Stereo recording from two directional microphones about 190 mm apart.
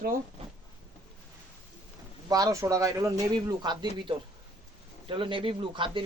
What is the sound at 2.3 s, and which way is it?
Speech, 20° right (ahead or behind).